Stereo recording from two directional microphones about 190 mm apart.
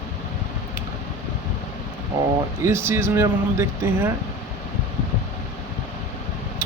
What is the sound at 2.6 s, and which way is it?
Speech, 15° right (ahead or behind).